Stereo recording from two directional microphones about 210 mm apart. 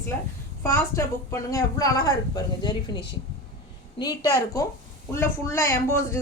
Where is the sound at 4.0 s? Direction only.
15° left (ahead or behind).